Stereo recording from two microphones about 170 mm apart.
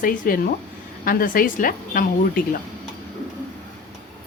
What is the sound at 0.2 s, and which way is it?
A woman's voice, 55° left (ahead or behind).